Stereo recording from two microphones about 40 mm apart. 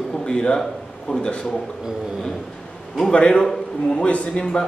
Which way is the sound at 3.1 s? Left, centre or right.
Left.